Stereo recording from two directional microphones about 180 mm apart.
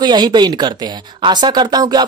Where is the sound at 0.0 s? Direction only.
25° right (ahead or behind).